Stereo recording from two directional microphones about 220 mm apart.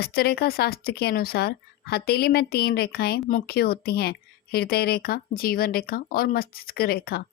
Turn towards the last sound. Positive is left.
turn(degrees=45)  # may be behind; listen again after turning